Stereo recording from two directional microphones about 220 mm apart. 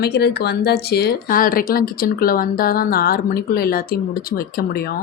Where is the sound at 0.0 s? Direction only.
50° left (ahead or behind).